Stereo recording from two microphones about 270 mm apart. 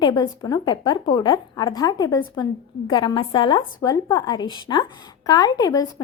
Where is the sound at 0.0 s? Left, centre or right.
Centre.